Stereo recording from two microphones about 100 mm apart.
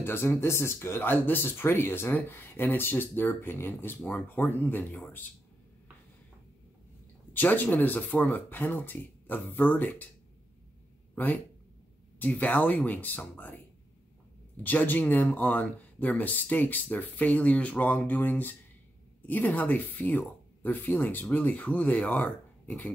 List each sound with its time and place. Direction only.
0.0 s speech: 20° left (ahead or behind)
7.3 s speech: 20° left (ahead or behind)
12.2 s speech: 15° left (ahead or behind)
14.6 s speech: 20° left (ahead or behind)